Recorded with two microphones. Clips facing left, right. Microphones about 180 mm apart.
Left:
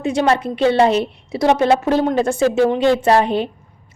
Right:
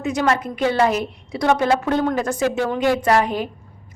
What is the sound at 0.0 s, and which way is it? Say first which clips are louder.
A woman's voice: left 3 dB; 30° left (ahead or behind).